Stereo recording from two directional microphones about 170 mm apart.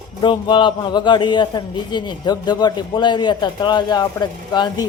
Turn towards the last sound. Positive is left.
turn(degrees=25)  # may be behind; listen again after turning